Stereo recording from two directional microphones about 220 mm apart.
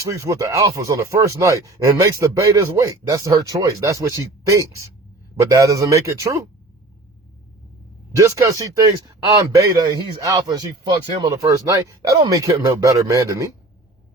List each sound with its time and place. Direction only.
0.0 s speech: 15° right (ahead or behind)
8.1 s speech: 15° right (ahead or behind)